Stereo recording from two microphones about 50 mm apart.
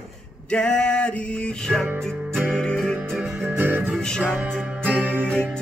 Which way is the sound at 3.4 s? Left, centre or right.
Right.